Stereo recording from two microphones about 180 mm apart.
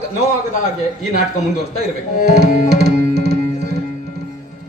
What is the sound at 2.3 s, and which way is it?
Music, 65° right (ahead or behind).